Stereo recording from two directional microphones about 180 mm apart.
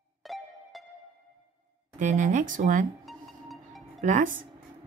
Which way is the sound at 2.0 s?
45° right (ahead or behind).